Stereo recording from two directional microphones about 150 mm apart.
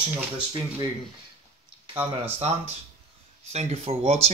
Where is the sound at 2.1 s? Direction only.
45° right (ahead or behind).